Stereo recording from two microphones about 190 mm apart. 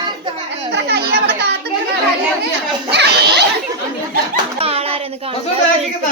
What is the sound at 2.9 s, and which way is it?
Children playing, 60° right (ahead or behind).